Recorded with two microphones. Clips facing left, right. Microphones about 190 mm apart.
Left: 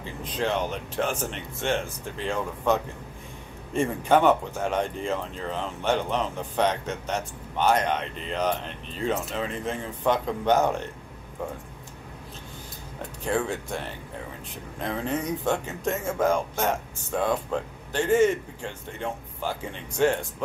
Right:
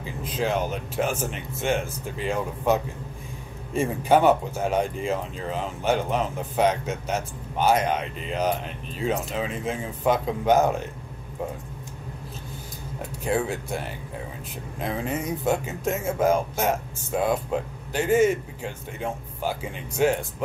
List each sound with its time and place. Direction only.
0.0 s speech: 5° right (ahead or behind)
13.2 s speech: 5° right (ahead or behind)